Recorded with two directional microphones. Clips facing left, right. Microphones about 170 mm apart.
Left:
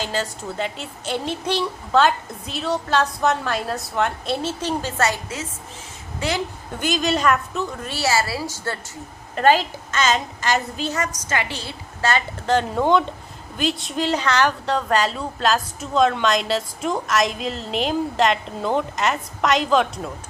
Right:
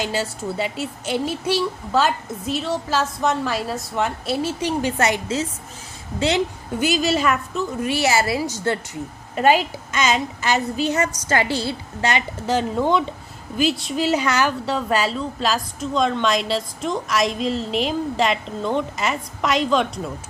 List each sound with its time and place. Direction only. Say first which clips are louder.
0.0 s a woman's voice: right 2 dB; 10° right (ahead or behind)
6.7 s a woman's voice: right 2 dB; 5° right (ahead or behind)
10.9 s a woman's voice: right 2 dB; 30° right (ahead or behind)
12.0 s a woman's voice: left 1 dB; 15° right (ahead or behind)
12.5 s a woman's voice: left 1 dB; centre (ahead or behind)